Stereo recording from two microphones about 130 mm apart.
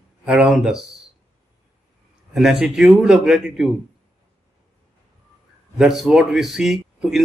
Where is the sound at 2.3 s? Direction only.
Centre (ahead or behind).